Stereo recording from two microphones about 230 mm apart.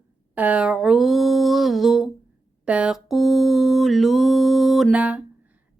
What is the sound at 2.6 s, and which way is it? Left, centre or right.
Mantra, centre.